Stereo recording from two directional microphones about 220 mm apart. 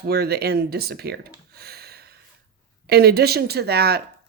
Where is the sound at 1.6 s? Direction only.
45° right (ahead or behind).